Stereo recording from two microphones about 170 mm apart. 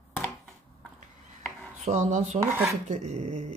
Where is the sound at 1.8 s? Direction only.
45° right (ahead or behind).